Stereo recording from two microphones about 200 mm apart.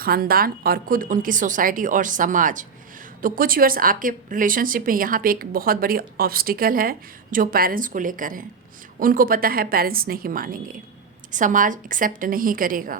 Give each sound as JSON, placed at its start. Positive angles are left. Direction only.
{"t": 0.0, "sound": "speech", "side_deg": -50}